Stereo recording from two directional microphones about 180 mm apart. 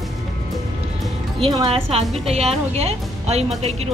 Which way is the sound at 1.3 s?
30° right (ahead or behind).